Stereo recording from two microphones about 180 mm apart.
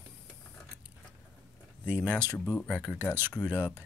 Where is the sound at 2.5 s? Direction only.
5° left (ahead or behind).